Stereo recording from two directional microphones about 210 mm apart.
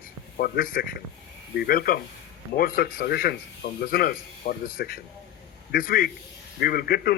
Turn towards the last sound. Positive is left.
turn(degrees=45)  # may be behind; listen again after turning